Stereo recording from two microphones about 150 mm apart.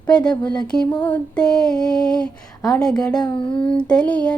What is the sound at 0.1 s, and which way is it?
Female singing, 5° left (ahead or behind).